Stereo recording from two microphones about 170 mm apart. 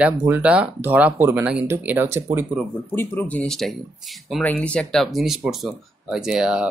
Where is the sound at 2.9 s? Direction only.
10° left (ahead or behind).